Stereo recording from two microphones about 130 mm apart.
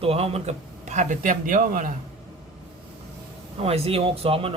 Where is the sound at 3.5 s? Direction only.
50° right (ahead or behind).